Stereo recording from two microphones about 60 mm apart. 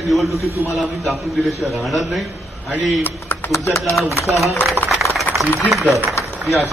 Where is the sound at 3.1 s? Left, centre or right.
Left.